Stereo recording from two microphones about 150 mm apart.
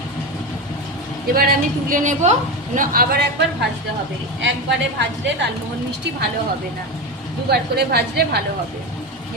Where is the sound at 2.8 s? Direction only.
75° right (ahead or behind).